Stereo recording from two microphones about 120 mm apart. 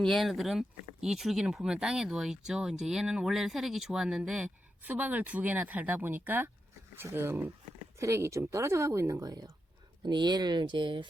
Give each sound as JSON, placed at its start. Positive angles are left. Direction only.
{"t": 0.0, "sound": "speech", "side_deg": 0}